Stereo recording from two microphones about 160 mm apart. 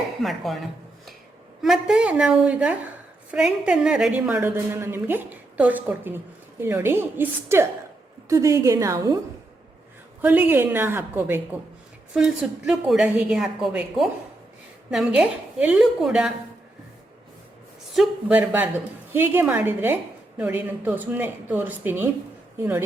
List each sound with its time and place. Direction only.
0.2 s a woman's voice: centre (ahead or behind); by 9.1 s 20° right (ahead or behind)
10.2 s a woman's voice: 10° right (ahead or behind)
12.1 s a woman's voice: 5° right (ahead or behind)
17.9 s a woman's voice: 5° right (ahead or behind)